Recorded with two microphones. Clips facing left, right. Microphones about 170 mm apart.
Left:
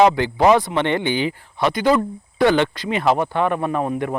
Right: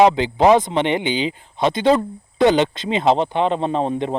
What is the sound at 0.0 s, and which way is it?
Speech, 20° right (ahead or behind).